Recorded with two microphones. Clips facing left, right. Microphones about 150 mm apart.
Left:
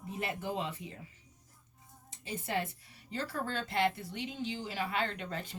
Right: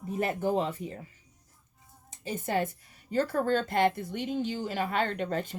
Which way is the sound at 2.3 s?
45° right (ahead or behind).